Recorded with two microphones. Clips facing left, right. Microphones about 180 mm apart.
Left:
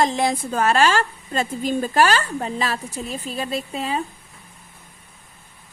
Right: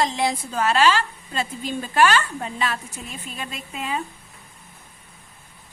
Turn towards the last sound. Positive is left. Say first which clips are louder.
# left 5 dB
turn(degrees=35)  # may be behind; listen again after turning